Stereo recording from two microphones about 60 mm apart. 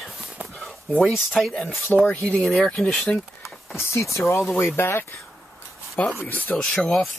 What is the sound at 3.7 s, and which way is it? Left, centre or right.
Speech, left.